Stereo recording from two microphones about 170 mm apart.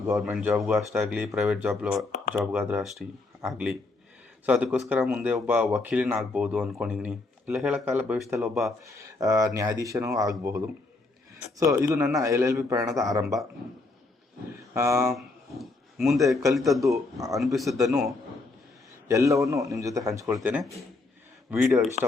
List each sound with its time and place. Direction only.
0.1 s speech: 10° right (ahead or behind)
8.6 s speech: 20° right (ahead or behind)
11.7 s speech: 15° right (ahead or behind)
14.7 s speech: 15° right (ahead or behind)
15.1 s speech: centre (ahead or behind)
19.0 s a man's voice: 20° right (ahead or behind)